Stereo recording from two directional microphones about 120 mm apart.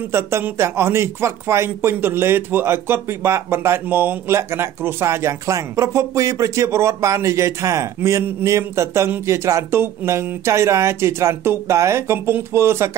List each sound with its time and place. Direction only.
0.1 s speech: 20° right (ahead or behind)